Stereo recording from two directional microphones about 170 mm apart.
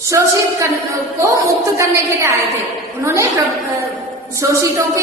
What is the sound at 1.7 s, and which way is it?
A woman's voice, 15° right (ahead or behind).